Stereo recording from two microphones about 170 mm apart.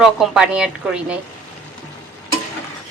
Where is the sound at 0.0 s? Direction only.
5° right (ahead or behind).